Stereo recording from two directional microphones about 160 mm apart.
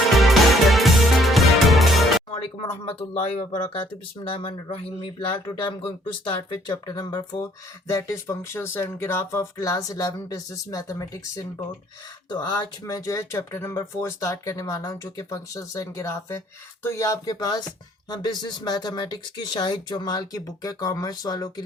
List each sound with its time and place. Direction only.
0.1 s music: centre (ahead or behind)
2.8 s speech: 35° left (ahead or behind)